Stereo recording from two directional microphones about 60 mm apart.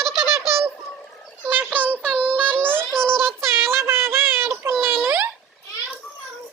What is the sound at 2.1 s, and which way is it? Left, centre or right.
Child singing, right.